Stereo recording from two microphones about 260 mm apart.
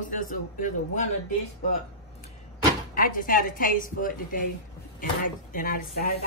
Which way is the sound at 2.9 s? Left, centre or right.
Left.